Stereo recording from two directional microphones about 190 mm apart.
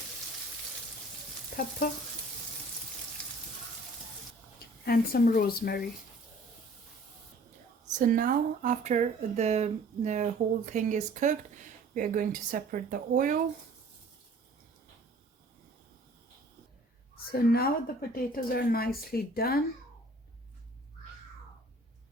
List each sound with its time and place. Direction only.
1.5 s stir: 50° left (ahead or behind)
4.9 s speech: 50° left (ahead or behind)
7.9 s speech: 45° right (ahead or behind)
17.3 s speech: 50° left (ahead or behind)